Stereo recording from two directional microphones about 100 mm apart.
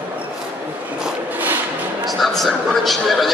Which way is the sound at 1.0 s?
15° right (ahead or behind).